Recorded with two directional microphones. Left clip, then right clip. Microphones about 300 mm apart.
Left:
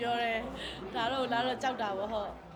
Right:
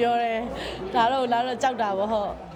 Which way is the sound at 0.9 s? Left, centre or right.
Right.